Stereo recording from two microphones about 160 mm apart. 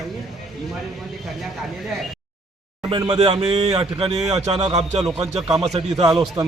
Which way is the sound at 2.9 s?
35° right (ahead or behind).